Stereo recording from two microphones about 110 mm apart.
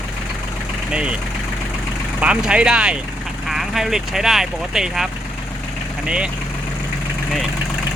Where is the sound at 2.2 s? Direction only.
10° right (ahead or behind).